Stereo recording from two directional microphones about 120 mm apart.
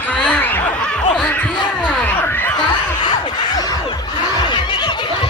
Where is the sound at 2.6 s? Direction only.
35° left (ahead or behind).